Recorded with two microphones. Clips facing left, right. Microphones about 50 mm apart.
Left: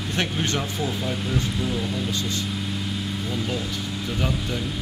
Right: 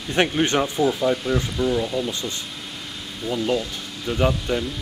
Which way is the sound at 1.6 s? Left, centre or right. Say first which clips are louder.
Right 6 dB; centre.